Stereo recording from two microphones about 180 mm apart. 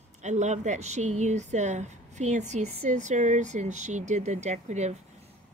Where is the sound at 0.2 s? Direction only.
40° right (ahead or behind).